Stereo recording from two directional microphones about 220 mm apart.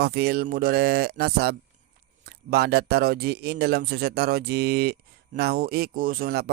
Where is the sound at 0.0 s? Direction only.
45° right (ahead or behind).